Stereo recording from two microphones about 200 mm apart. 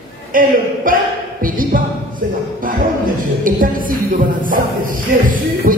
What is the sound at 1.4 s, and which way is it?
Music, 45° right (ahead or behind).